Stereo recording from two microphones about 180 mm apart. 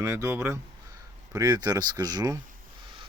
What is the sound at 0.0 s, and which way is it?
Speech, 15° right (ahead or behind).